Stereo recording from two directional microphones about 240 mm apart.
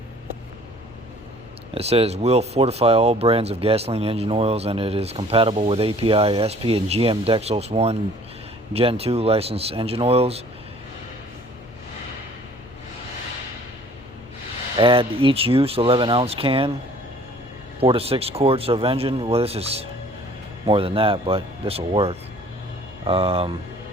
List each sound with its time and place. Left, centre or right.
1.7 s speech: right
14.8 s speech: right
17.7 s speech: right